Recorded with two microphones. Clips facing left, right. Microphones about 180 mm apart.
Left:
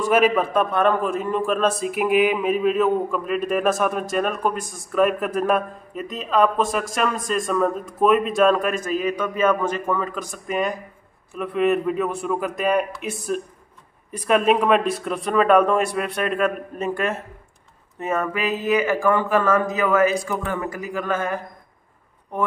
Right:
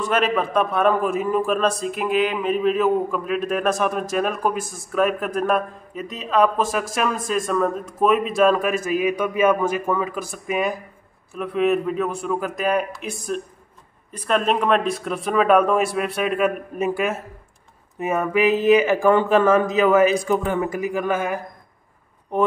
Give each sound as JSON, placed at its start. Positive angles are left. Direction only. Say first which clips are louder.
{"t": 0.0, "sound": "a man's voice", "louder": "left 3 dB", "side_deg": 10}